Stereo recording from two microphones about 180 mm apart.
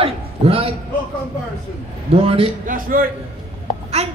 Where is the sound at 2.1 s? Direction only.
30° right (ahead or behind).